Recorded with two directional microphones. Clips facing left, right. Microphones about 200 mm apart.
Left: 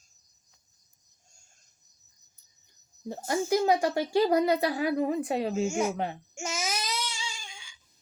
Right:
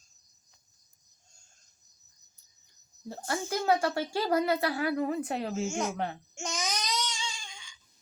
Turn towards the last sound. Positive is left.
turn(degrees=10)  # may be behind; listen again after turning